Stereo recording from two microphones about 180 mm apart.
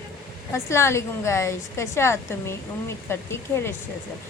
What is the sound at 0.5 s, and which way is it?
Speech, 15° left (ahead or behind).